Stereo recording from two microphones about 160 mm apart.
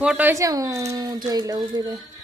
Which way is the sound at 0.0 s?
10° right (ahead or behind).